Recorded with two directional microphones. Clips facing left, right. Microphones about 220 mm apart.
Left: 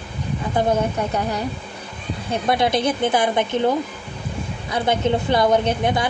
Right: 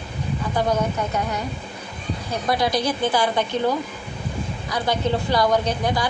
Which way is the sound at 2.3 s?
25° left (ahead or behind).